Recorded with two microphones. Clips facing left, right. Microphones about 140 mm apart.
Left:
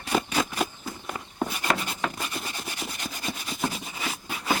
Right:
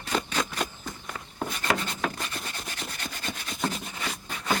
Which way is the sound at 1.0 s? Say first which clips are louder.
Left 5 dB; 20° left (ahead or behind).